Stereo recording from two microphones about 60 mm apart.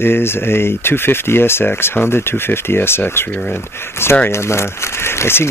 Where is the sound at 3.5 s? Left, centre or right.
Left.